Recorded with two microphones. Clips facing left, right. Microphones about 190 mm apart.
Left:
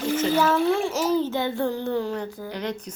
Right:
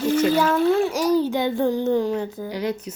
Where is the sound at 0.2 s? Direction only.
15° right (ahead or behind).